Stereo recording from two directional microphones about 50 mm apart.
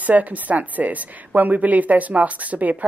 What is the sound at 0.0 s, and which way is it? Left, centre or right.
A woman's voice, right.